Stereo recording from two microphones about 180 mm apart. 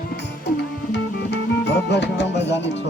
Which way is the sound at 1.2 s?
70° left (ahead or behind).